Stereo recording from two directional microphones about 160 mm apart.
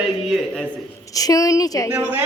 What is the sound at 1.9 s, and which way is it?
Speech, 10° right (ahead or behind).